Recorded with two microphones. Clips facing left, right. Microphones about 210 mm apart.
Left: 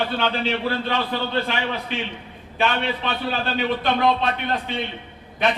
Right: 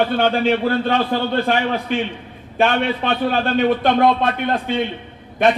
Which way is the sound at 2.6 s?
50° right (ahead or behind).